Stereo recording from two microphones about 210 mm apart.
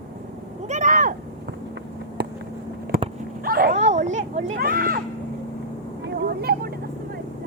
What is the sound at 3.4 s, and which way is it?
Dog, 45° right (ahead or behind).